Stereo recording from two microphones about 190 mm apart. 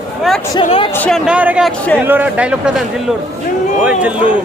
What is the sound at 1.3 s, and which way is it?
A man's voice, 5° right (ahead or behind).